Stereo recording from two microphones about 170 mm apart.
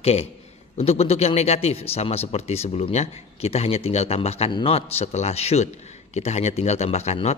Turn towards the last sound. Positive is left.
turn(degrees=40)  # may be behind; listen again after turning